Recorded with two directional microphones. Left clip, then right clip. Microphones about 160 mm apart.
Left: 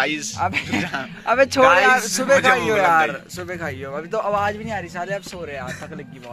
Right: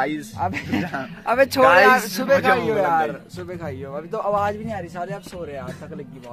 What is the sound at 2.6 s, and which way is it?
A man's voice, 10° left (ahead or behind).